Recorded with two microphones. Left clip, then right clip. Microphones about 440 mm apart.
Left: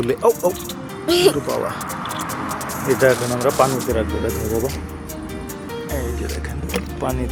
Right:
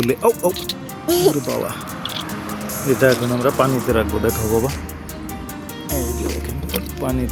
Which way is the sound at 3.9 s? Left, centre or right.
Right.